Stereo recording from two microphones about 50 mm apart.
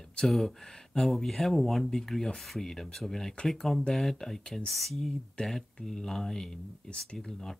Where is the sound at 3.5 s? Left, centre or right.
Centre.